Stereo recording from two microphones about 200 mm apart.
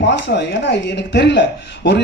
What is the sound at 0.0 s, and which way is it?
Speech, 60° left (ahead or behind).